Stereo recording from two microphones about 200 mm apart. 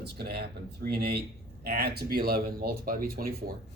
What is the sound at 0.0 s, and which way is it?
Speech, 55° right (ahead or behind).